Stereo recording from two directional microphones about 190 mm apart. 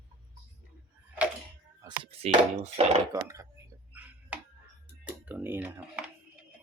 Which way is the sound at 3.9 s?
10° right (ahead or behind).